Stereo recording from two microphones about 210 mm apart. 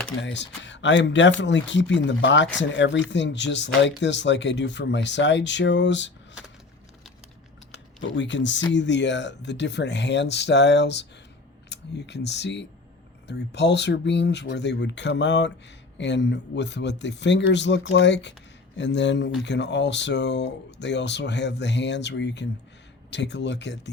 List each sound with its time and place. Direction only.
0.2 s speech: 60° left (ahead or behind)
7.7 s speech: 60° left (ahead or behind)